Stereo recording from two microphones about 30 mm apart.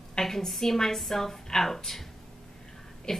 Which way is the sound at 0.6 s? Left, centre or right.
Centre.